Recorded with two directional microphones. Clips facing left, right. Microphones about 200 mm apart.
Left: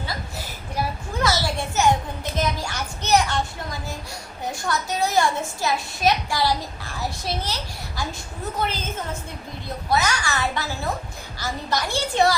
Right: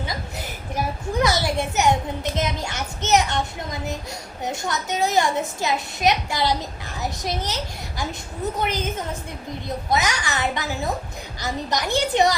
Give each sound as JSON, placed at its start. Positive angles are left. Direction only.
{"t": 0.1, "sound": "a sound", "side_deg": -20}
{"t": 2.3, "sound": "a woman's voice", "side_deg": -20}
{"t": 9.9, "sound": "a woman's voice", "side_deg": -20}